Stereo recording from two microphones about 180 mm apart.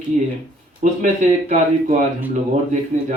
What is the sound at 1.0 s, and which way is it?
A man's voice, 40° right (ahead or behind).